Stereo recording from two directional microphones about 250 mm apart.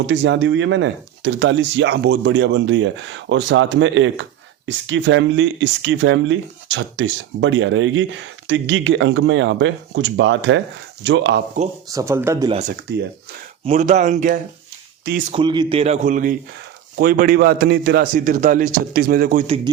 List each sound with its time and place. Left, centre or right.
0.1 s speech: right
11.9 s speech: centre
13.7 s a man's voice: right
15.3 s a man's voice: centre